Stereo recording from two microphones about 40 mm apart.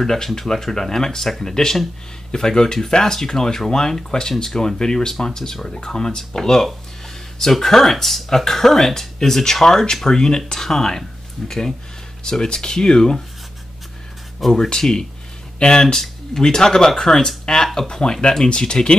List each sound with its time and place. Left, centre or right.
0.0 s speech: centre
14.5 s speech: centre